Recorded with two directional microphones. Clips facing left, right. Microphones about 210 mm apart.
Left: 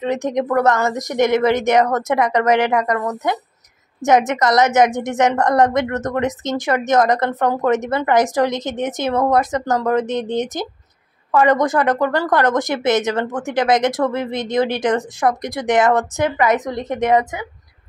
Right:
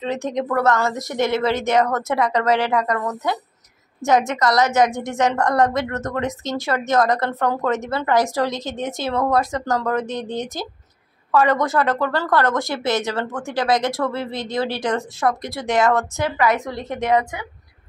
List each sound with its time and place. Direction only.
0.0 s a woman's voice: 15° left (ahead or behind)